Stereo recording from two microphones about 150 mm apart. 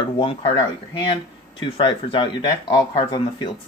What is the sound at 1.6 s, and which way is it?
Speech, 35° left (ahead or behind).